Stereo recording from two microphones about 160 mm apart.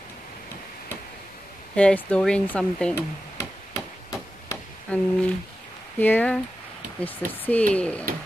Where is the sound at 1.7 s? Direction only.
5° left (ahead or behind).